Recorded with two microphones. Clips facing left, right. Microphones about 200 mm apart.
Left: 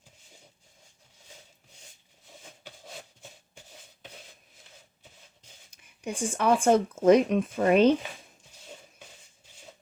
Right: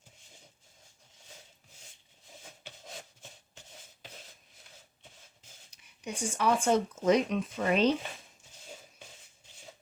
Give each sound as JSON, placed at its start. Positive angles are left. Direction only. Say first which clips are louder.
{"t": 5.7, "sound": "speech", "louder": "left 5 dB", "side_deg": 55}